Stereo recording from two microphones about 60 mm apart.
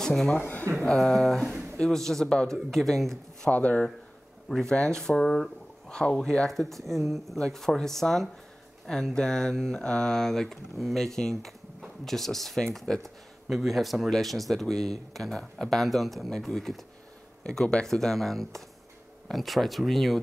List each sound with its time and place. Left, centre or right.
0.0 s speech: centre
0.4 s speech: left
0.7 s speech: centre
3.5 s speech: left
4.5 s speech: centre